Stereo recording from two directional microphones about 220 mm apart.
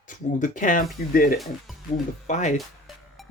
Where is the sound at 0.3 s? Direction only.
35° left (ahead or behind).